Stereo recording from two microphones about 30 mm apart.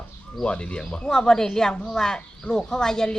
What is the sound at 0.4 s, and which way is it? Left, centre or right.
Speech, left.